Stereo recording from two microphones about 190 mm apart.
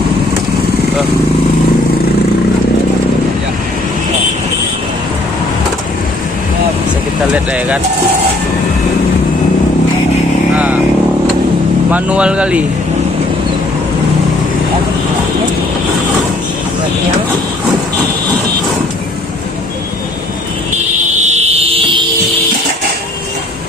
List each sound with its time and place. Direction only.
7.3 s speech: 5° right (ahead or behind)
11.9 s speech: 5° right (ahead or behind)
21.2 s fire alarm: 35° right (ahead or behind)